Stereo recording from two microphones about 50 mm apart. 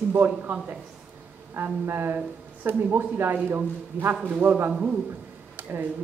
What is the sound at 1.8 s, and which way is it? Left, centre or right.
A man's voice, right.